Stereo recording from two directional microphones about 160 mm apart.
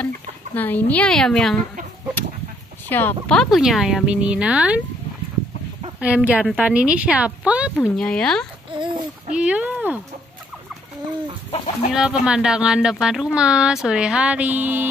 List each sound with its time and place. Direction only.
0.6 s speech: 10° left (ahead or behind)
2.9 s speech: 10° left (ahead or behind)
3.3 s a woman's voice: centre (ahead or behind)
5.9 s a woman's voice: 10° right (ahead or behind)
7.7 s speech: 5° left (ahead or behind)
8.7 s speech: 30° right (ahead or behind)
9.3 s a woman's voice: 5° right (ahead or behind)
11.5 s speech: 40° left (ahead or behind)
11.9 s speech: 5° right (ahead or behind)